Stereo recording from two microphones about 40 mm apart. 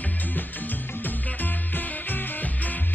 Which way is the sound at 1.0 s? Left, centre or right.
Left.